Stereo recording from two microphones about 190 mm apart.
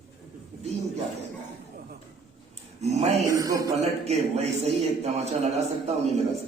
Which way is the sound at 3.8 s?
35° right (ahead or behind).